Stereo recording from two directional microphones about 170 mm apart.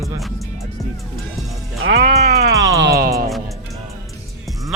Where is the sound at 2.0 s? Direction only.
40° right (ahead or behind).